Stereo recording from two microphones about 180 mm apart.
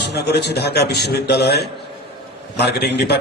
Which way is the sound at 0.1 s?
65° left (ahead or behind).